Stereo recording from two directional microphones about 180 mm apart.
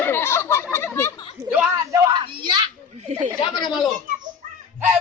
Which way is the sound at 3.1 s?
40° right (ahead or behind).